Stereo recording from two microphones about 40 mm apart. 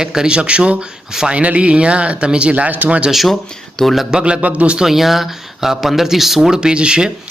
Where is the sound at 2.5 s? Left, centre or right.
Right.